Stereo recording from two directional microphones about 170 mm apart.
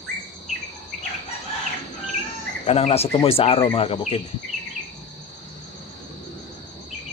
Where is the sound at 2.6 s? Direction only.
35° left (ahead or behind).